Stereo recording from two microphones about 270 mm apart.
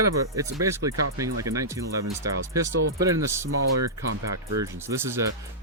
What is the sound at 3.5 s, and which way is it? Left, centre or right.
Speech, right.